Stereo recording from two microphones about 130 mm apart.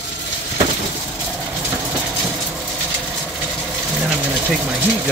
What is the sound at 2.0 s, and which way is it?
Vehicle, 10° right (ahead or behind).